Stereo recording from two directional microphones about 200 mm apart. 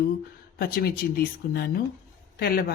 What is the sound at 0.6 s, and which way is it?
Speech, 50° left (ahead or behind).